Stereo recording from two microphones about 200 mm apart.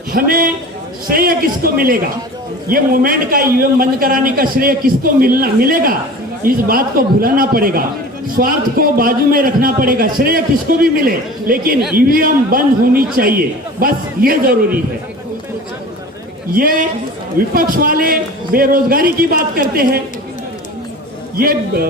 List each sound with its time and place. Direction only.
0.1 s a man's voice: 45° right (ahead or behind)
16.6 s a man's voice: 45° right (ahead or behind)
21.3 s a man's voice: 50° right (ahead or behind)